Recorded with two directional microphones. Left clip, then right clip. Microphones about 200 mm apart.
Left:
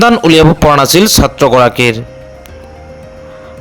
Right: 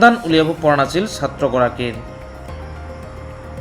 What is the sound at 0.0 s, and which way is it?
A man's voice, 55° left (ahead or behind).